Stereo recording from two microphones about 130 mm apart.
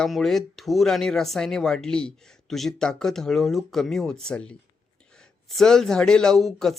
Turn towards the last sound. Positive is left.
turn(degrees=5)  # may be behind; listen again after turning